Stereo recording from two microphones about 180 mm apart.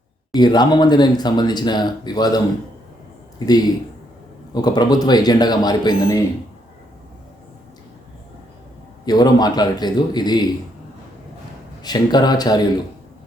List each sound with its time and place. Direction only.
0.3 s a man's voice: 25° left (ahead or behind)
9.0 s speech: 20° left (ahead or behind)
11.8 s speech: 20° left (ahead or behind)